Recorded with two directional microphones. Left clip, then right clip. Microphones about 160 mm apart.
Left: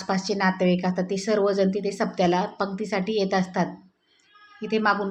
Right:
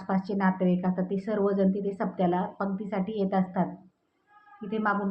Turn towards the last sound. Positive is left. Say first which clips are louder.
# left 6 dB
turn(degrees=25)  # may be behind; listen again after turning